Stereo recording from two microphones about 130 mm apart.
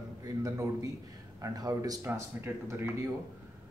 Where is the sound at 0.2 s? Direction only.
25° right (ahead or behind).